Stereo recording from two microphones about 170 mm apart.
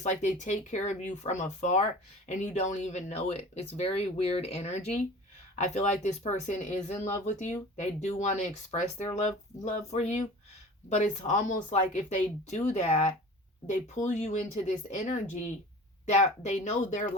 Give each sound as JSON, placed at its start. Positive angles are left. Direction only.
{"t": 0.0, "sound": "speech", "side_deg": 45}